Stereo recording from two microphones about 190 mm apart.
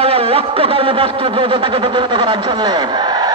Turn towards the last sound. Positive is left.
turn(degrees=-20)  # may be behind; listen again after turning